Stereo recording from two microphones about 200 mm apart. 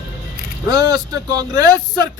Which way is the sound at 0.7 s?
20° right (ahead or behind).